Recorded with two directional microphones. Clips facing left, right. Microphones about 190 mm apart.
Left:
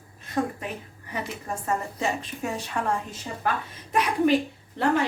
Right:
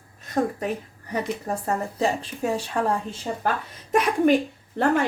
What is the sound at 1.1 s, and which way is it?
A woman's voice, 40° right (ahead or behind).